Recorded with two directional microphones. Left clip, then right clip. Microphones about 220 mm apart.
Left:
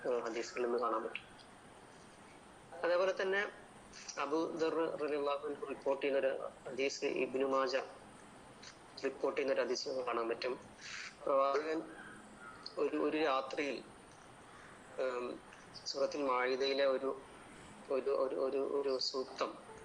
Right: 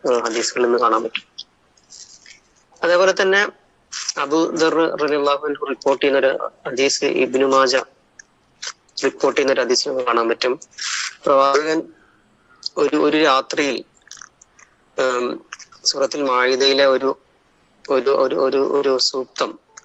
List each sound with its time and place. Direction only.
0.0 s speech: 45° right (ahead or behind)
2.8 s a man's voice: 45° right (ahead or behind)
14.9 s a man's voice: 45° right (ahead or behind)